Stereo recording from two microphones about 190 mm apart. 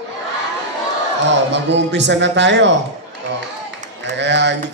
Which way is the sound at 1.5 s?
65° right (ahead or behind).